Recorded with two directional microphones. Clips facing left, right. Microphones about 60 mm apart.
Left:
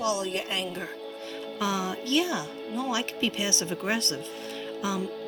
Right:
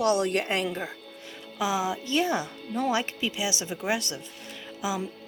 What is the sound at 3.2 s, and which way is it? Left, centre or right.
Speech, centre.